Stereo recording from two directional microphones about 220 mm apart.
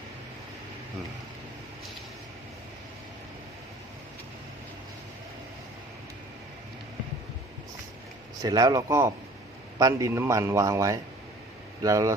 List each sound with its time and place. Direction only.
8.4 s a man's voice: 15° right (ahead or behind)